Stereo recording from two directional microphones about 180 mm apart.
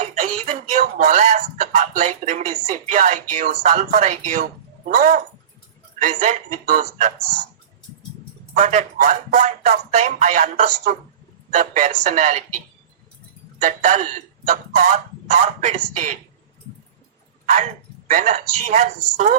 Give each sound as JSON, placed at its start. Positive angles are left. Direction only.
{"t": 0.0, "sound": "speech", "side_deg": -40}
{"t": 8.5, "sound": "speech", "side_deg": -40}
{"t": 17.4, "sound": "a sound", "side_deg": -40}
{"t": 18.1, "sound": "speech", "side_deg": -45}